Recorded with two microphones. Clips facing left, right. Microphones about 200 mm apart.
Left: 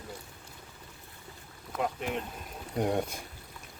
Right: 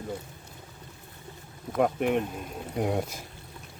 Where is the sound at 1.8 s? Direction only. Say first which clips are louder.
Right 8 dB; 55° right (ahead or behind).